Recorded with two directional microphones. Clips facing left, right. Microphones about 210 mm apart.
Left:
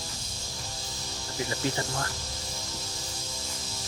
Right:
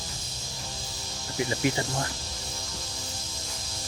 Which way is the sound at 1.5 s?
15° right (ahead or behind).